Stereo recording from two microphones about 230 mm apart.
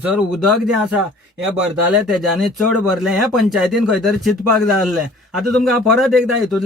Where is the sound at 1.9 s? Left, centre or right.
Centre.